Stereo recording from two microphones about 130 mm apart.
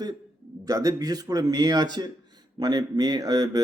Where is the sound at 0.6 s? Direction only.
25° right (ahead or behind).